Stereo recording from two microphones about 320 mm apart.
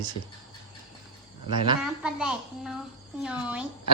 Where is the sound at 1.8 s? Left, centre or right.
Centre.